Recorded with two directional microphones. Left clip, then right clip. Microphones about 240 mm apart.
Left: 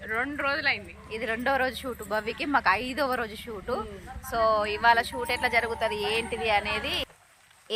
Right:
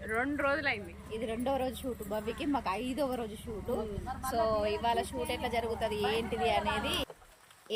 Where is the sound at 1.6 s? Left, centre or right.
Centre.